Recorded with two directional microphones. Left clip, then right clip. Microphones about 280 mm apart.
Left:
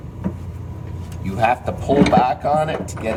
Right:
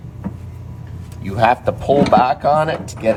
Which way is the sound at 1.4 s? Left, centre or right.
Right.